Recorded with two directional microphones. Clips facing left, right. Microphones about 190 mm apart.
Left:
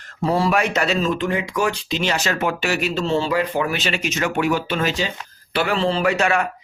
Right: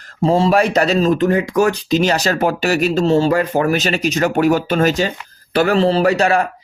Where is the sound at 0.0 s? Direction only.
25° right (ahead or behind).